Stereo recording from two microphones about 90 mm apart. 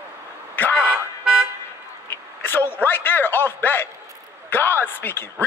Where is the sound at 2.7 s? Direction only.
25° left (ahead or behind).